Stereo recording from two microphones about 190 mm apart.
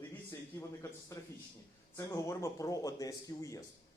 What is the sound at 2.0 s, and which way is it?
A man's voice, 15° left (ahead or behind).